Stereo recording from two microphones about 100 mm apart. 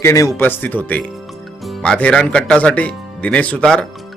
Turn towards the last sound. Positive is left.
turn(degrees=10)  # may be behind; listen again after turning